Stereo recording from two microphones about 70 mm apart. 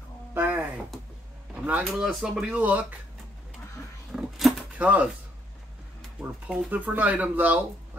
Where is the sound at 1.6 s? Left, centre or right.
Right.